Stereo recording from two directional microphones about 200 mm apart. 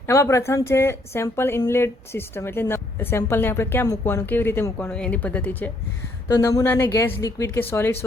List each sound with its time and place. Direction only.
0.1 s a woman's voice: 15° left (ahead or behind)